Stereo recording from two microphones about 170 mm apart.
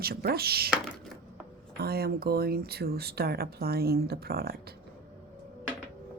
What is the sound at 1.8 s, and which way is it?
Speech, 65° right (ahead or behind).